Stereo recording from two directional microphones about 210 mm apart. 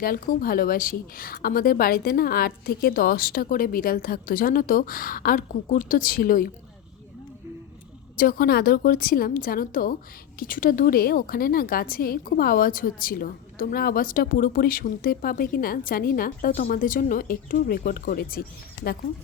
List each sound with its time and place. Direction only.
0.0 s a woman's voice: 45° left (ahead or behind)
8.2 s a woman's voice: 45° left (ahead or behind)